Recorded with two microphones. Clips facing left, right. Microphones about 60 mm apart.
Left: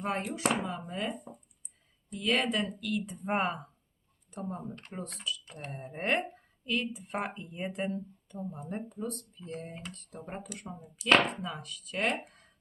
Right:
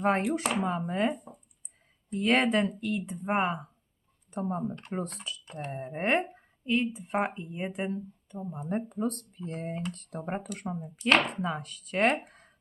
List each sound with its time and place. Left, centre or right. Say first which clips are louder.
0.3 s speech: right 2 dB; right
3.2 s speech: right 3 dB; centre
4.4 s speech: right 7 dB; right; by 8.6 s centre
8.7 s speech: right 8 dB; right
10.7 s speech: right 10 dB; right
11.4 s speech: right 6 dB; right